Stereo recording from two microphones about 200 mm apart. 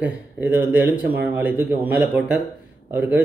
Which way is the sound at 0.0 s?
10° right (ahead or behind).